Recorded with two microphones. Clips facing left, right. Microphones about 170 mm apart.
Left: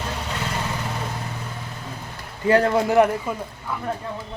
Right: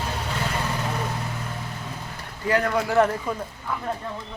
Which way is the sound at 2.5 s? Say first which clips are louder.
Left 5 dB; 30° left (ahead or behind).